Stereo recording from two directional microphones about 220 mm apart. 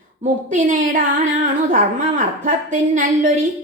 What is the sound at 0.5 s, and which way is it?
A woman's voice, 35° right (ahead or behind).